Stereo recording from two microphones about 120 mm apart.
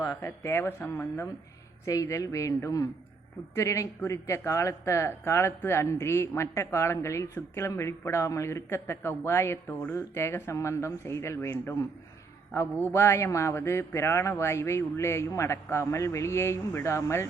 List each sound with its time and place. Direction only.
0.0 s speech: 25° left (ahead or behind)
12.9 s speech: 25° left (ahead or behind)